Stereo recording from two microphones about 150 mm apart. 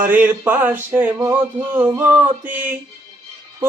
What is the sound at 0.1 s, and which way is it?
Male singing, 10° right (ahead or behind).